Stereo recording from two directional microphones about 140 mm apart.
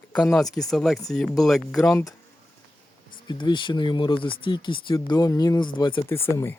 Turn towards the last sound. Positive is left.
turn(degrees=15)  # may be behind; listen again after turning